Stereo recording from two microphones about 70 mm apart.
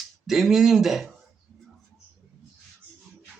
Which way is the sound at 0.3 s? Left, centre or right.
Centre.